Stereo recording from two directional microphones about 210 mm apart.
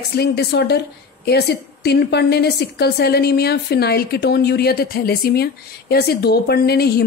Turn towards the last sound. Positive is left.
turn(degrees=50)  # may be behind; listen again after turning